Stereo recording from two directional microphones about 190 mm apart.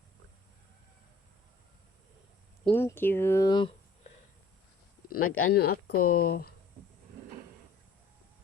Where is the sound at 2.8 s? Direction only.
10° left (ahead or behind).